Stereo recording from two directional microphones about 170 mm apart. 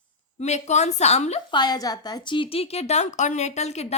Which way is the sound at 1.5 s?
25° left (ahead or behind).